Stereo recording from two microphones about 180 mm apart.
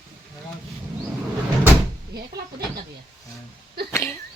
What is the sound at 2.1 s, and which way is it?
Speech, 60° right (ahead or behind).